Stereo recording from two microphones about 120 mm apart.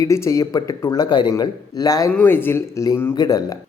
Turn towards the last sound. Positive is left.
turn(degrees=35)  # may be behind; listen again after turning